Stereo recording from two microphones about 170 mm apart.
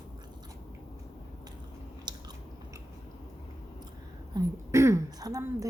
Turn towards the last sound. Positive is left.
turn(degrees=-20)  # may be behind; listen again after turning